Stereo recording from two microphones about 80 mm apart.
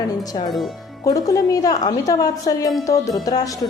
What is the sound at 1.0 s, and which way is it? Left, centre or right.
A woman's voice, left.